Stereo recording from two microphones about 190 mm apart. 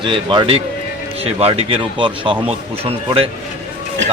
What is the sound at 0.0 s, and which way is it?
A man's voice, 25° right (ahead or behind).